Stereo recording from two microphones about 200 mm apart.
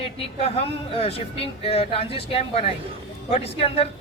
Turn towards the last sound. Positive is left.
turn(degrees=30)  # may be behind; listen again after turning